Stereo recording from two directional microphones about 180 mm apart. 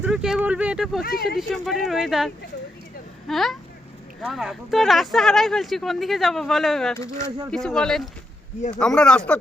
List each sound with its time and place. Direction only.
0.0 s speech: 5° right (ahead or behind)
1.0 s speech: 60° left (ahead or behind)
1.4 s speech: centre (ahead or behind)